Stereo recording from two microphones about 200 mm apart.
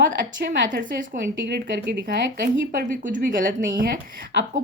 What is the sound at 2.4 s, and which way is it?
A woman's voice, 45° right (ahead or behind).